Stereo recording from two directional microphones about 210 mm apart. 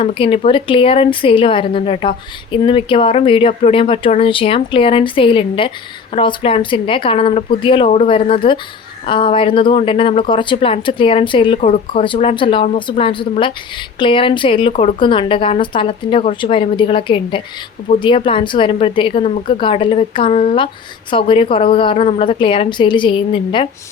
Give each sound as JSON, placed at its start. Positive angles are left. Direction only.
{"t": 0.0, "sound": "a woman's voice", "side_deg": 25}